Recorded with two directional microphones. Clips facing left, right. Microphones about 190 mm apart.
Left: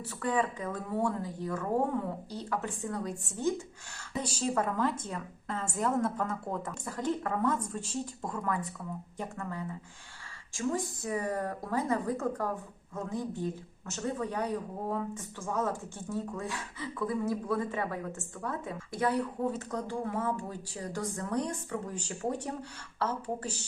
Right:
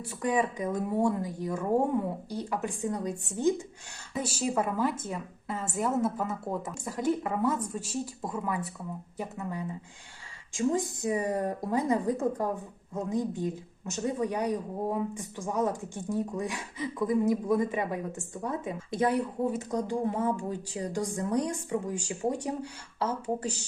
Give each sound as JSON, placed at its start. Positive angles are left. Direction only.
{"t": 0.0, "sound": "speech", "side_deg": -15}
{"t": 4.1, "sound": "speech", "side_deg": -5}